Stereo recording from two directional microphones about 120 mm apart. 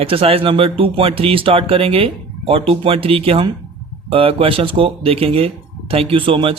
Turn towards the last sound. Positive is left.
turn(degrees=-50)  # may be behind; listen again after turning